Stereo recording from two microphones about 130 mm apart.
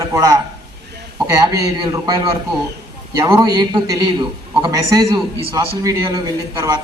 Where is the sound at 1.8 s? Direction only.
35° right (ahead or behind).